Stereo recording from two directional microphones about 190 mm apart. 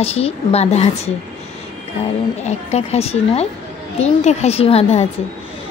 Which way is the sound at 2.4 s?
35° left (ahead or behind).